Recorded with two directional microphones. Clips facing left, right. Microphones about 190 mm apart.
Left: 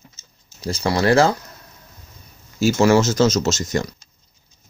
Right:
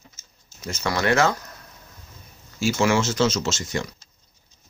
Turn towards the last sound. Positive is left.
turn(degrees=40)  # may be behind; listen again after turning